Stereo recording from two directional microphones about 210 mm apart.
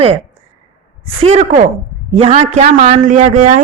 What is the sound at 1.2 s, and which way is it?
A woman's voice, 30° right (ahead or behind).